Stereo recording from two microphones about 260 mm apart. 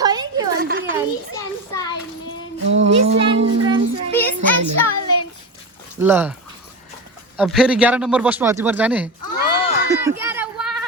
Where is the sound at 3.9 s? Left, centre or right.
Right.